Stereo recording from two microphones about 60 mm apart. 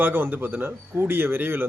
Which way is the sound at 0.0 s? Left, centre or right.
Right.